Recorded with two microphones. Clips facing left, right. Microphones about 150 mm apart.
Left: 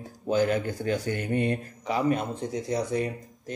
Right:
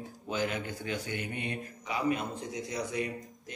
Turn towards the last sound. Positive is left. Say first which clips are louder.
# left 5 dB
turn(degrees=35)  # may be behind; listen again after turning